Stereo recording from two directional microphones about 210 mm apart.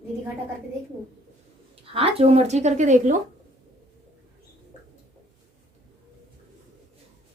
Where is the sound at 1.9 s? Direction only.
25° right (ahead or behind).